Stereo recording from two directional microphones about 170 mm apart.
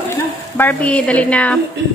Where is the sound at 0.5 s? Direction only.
10° left (ahead or behind).